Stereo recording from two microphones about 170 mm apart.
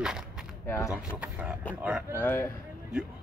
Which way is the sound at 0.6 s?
15° left (ahead or behind).